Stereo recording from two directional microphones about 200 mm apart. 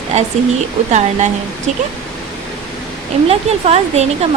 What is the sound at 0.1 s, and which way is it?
Speech, 35° right (ahead or behind).